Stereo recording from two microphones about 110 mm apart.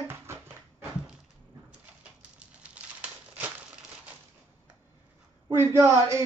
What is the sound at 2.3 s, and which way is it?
Crumpling, 10° right (ahead or behind).